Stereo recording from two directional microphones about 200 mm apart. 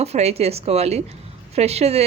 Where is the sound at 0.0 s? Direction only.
30° right (ahead or behind).